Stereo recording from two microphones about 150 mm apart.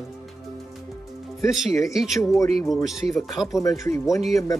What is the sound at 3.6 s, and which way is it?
Speech, 20° left (ahead or behind).